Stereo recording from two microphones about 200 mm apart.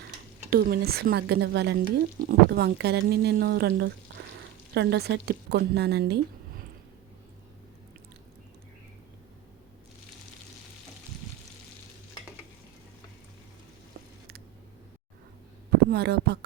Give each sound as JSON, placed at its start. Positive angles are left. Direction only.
{"t": 0.5, "sound": "a woman's voice", "side_deg": -50}
{"t": 15.9, "sound": "speech", "side_deg": -55}